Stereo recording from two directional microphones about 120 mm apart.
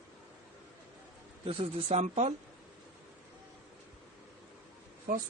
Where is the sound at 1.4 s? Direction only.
55° right (ahead or behind).